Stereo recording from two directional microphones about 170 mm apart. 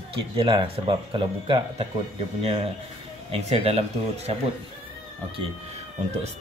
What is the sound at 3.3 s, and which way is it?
Speech, 35° right (ahead or behind).